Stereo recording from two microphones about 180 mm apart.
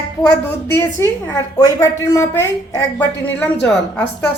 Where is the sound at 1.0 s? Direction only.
15° left (ahead or behind).